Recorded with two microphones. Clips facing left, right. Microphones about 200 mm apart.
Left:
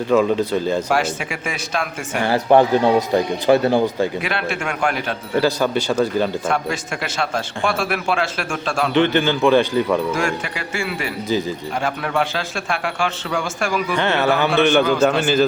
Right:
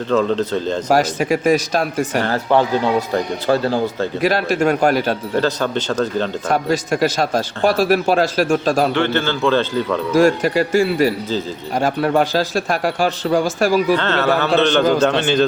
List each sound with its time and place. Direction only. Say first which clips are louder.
0.1 s speech: left 1 dB; 10° left (ahead or behind)
0.9 s a man's voice: right 5 dB; 40° right (ahead or behind)
2.2 s speech: left 5 dB; 15° left (ahead or behind)
4.2 s a man's voice: right 8 dB; 40° right (ahead or behind)
5.4 s speech: left 4 dB; 10° left (ahead or behind)
6.5 s a man's voice: right 5 dB; 40° right (ahead or behind)
8.9 s speech: left 2 dB; 15° left (ahead or behind)
10.2 s a man's voice: right 10 dB; 40° right (ahead or behind)
11.3 s speech: left 2 dB; 15° left (ahead or behind)
11.7 s a man's voice: right 8 dB; 40° right (ahead or behind)
13.9 s speech: right 2 dB; 15° left (ahead or behind)